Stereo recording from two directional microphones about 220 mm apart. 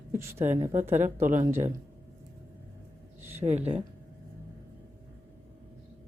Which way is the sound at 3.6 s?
5° right (ahead or behind).